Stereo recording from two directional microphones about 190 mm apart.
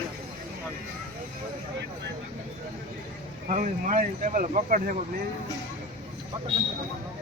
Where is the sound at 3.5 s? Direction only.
40° right (ahead or behind).